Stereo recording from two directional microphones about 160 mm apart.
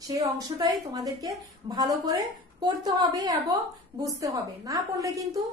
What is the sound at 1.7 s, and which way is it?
A woman's voice, 20° right (ahead or behind).